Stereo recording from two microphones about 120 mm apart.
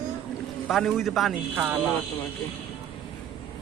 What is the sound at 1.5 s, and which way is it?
Speech, 15° right (ahead or behind).